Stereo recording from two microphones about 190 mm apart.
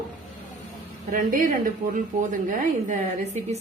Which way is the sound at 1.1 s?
45° right (ahead or behind).